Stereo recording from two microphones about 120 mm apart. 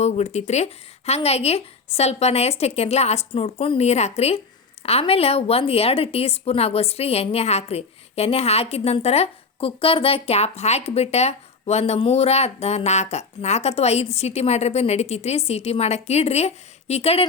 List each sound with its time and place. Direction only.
0.0 s a woman's voice: 65° left (ahead or behind)